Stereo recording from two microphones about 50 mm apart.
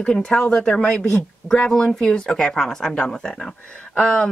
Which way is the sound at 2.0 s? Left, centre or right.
Centre.